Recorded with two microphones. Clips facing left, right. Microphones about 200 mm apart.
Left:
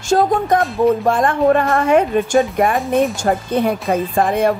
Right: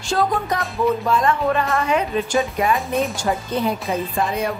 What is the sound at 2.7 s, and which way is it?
Speech, centre (ahead or behind).